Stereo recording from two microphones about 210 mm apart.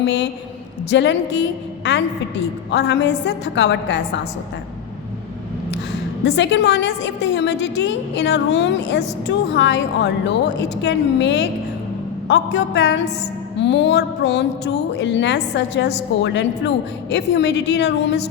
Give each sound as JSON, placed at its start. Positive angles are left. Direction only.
{"t": 0.0, "sound": "a woman's voice", "side_deg": 55}
{"t": 6.2, "sound": "a woman's voice", "side_deg": 55}